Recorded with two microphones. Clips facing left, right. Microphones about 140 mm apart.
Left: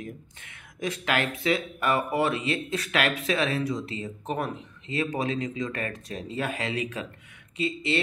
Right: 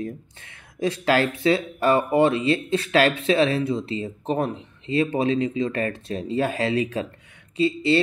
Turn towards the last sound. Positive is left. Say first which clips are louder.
# right 8 dB
turn(degrees=-30)  # may be behind; listen again after turning